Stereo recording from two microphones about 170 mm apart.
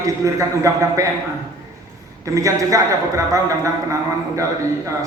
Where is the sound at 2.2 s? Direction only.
20° right (ahead or behind).